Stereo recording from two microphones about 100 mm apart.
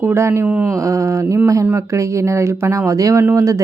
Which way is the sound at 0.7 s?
30° right (ahead or behind).